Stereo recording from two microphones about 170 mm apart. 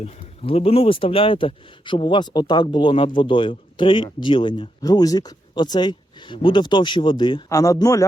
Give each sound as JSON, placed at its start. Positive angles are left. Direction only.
{"t": 0.0, "sound": "speech", "side_deg": 35}